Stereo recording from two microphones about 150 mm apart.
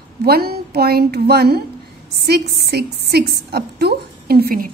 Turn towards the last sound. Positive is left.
turn(degrees=-80)